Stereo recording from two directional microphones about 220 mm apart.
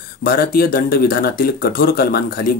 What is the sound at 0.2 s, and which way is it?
Speech, 40° left (ahead or behind).